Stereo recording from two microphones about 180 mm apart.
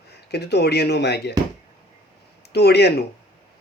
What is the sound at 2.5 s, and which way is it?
Speech, 65° left (ahead or behind).